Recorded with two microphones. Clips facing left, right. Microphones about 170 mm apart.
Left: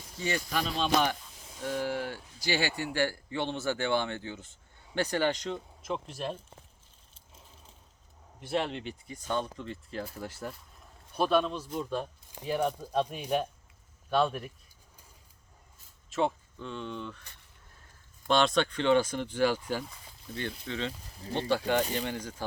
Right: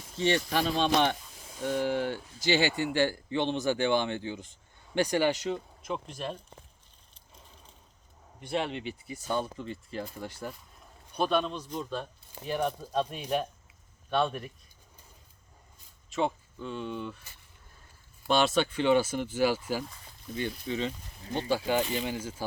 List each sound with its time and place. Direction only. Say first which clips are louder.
0.2 s speech: right 5 dB; 25° right (ahead or behind)
1.4 s spray: right 3 dB; 5° right (ahead or behind)
1.6 s speech: right 4 dB; 25° right (ahead or behind); by 6.4 s centre (ahead or behind)
7.3 s keys jangling: right 1 dB; centre (ahead or behind)
8.4 s speech: even; centre (ahead or behind)
15.8 s speech: even; centre (ahead or behind)
21.2 s speech: even; 30° left (ahead or behind)
21.5 s speech: even; 5° right (ahead or behind)